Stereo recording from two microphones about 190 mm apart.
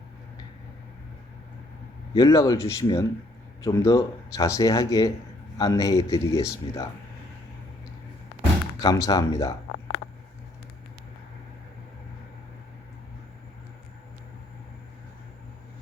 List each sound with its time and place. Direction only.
2.1 s speech: 20° left (ahead or behind)
8.8 s speech: 20° left (ahead or behind)